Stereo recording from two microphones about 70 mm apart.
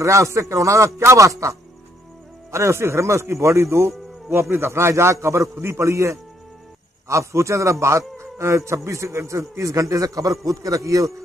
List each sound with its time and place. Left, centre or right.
0.0 s a man's voice: right